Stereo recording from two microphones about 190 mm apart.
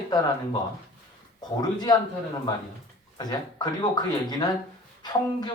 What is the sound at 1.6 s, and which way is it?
Speech, 20° left (ahead or behind).